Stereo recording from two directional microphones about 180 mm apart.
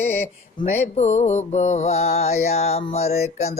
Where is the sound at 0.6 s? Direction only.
40° left (ahead or behind).